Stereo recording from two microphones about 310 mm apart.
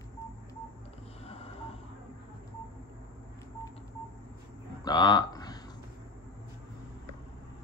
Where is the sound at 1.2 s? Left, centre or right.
Centre.